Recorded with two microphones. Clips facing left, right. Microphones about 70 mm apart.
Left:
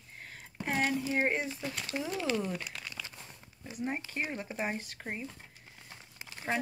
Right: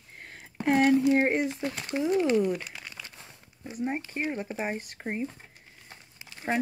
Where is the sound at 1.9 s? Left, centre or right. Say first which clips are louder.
Right 9 dB; right.